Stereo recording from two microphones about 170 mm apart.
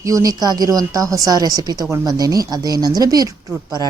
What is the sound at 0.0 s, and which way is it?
A woman's voice, 20° right (ahead or behind).